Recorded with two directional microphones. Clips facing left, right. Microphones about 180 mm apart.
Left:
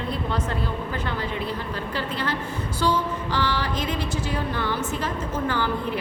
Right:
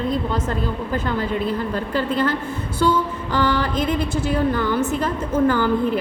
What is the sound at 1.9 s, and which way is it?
Speech, 50° right (ahead or behind).